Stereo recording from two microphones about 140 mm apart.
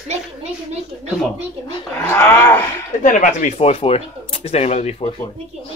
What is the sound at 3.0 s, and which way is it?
Speech, 70° left (ahead or behind).